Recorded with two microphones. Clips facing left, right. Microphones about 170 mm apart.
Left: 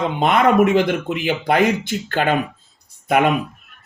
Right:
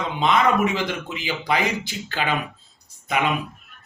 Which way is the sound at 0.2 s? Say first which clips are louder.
Left 4 dB; 55° left (ahead or behind).